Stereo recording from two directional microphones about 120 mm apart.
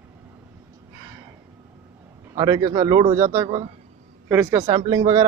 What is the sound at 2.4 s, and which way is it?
Speech, 35° right (ahead or behind).